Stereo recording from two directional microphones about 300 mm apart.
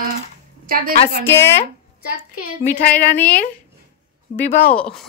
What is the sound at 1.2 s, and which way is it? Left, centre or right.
Speech, centre.